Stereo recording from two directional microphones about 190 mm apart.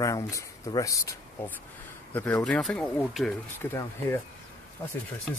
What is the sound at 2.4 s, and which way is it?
Speech, 5° left (ahead or behind).